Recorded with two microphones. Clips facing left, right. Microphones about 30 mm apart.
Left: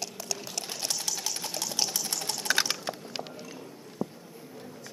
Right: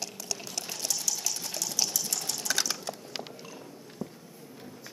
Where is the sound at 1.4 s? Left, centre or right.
Left.